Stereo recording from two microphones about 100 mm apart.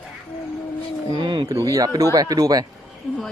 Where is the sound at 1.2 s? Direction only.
50° right (ahead or behind).